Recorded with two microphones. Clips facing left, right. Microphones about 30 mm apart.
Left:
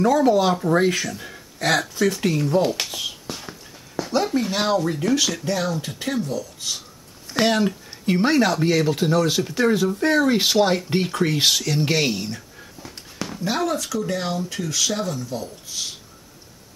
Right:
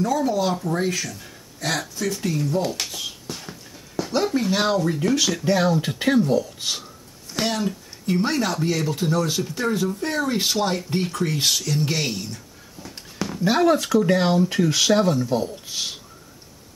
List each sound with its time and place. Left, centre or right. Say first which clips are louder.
0.0 s speech: left 5 dB; left
1.1 s a sound: left 5 dB; left
2.0 s speech: left 4 dB; left
2.7 s a sound: left 2 dB; centre
5.4 s speech: right 4 dB; centre
7.3 s speech: left 5 dB; left
8.3 s speech: left 4 dB; centre
12.8 s a sound: right 2 dB; centre
13.4 s speech: right 6 dB; centre
13.7 s speech: right 6 dB; right